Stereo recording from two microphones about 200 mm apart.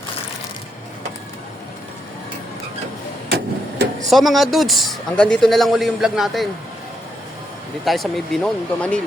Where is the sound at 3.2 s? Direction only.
55° right (ahead or behind).